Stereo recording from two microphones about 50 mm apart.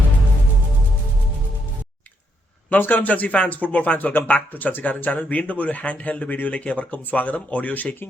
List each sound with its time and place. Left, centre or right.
2.6 s speech: left